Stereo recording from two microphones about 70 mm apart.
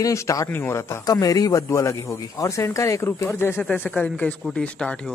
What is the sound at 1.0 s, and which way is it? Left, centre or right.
Speech, left.